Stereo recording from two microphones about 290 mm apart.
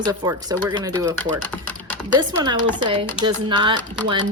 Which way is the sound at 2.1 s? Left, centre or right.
Centre.